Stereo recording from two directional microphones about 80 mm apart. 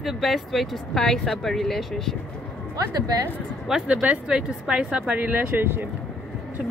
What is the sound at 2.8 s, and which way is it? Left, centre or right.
Speech, right.